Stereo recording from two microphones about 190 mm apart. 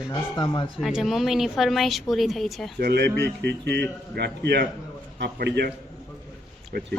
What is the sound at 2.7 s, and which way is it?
A man's voice, 60° right (ahead or behind).